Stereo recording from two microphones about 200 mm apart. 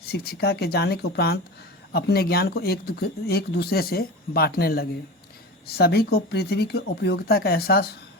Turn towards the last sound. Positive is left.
turn(degrees=50)  # may be behind; listen again after turning